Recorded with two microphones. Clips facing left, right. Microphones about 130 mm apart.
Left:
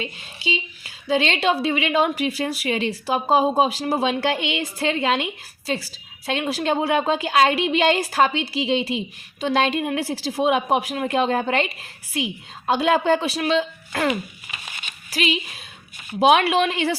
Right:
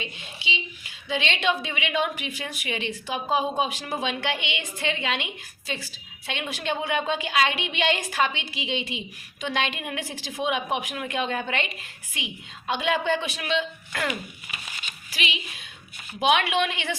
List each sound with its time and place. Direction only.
0.0 s a woman's voice: 40° left (ahead or behind)